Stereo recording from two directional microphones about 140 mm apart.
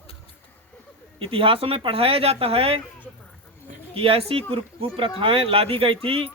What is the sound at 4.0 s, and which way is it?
Speech, 40° right (ahead or behind).